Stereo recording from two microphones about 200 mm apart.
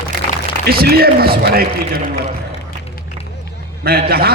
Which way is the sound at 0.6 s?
50° right (ahead or behind).